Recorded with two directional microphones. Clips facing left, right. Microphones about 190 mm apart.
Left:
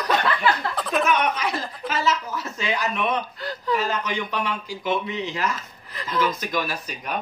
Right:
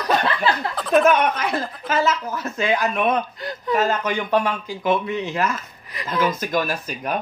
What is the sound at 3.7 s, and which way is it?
Speech, 50° right (ahead or behind).